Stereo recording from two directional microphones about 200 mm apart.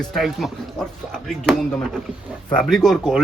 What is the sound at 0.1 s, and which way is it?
Speech, centre (ahead or behind).